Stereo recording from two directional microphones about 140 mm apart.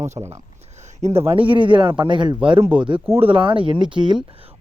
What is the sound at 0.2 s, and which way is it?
Speech, 45° right (ahead or behind).